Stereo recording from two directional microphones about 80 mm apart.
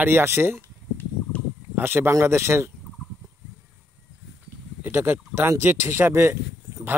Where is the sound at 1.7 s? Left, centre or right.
Right.